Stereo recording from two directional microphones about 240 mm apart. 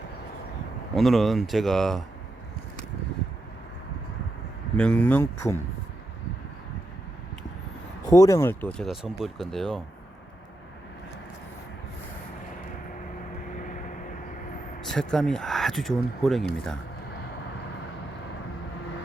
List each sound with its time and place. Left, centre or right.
0.9 s speech: centre
4.8 s speech: centre
8.1 s speech: centre
8.9 s speech: centre
13.6 s vehicle: left
14.8 s vehicle: centre
15.1 s speech: centre